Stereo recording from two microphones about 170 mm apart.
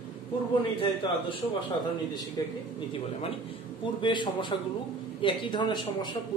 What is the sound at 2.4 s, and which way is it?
Speech, 20° left (ahead or behind).